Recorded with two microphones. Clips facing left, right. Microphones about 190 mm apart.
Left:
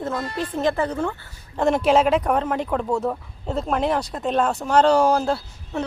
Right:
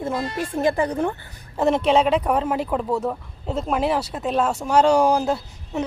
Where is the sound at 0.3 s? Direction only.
10° right (ahead or behind).